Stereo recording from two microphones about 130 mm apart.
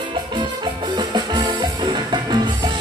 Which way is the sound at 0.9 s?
35° right (ahead or behind).